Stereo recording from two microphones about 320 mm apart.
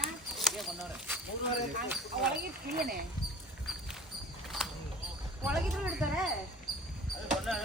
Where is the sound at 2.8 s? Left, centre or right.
Right.